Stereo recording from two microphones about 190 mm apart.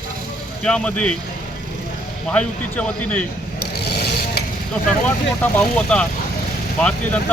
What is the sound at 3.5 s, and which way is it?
Vehicle, 55° left (ahead or behind).